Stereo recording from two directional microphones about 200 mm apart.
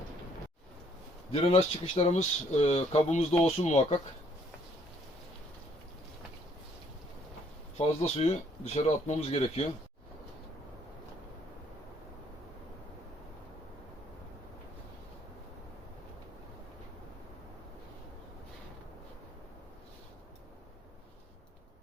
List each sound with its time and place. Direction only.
1.3 s speech: 30° left (ahead or behind)
7.8 s speech: 30° left (ahead or behind)